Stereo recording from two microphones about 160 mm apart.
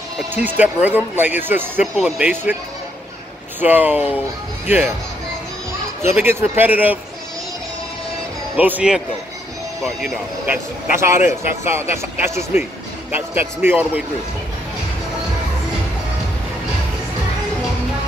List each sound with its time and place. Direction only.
0.3 s speech: 10° right (ahead or behind)
3.6 s speech: 10° right (ahead or behind)
6.0 s speech: 15° right (ahead or behind)
8.5 s speech: 10° right (ahead or behind)